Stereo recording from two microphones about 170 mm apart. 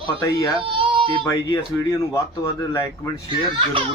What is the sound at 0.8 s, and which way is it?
Baby cry, 30° right (ahead or behind).